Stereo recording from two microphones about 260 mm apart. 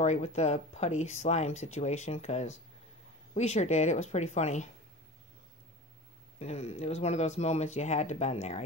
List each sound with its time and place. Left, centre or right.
0.0 s speech: left
6.4 s speech: left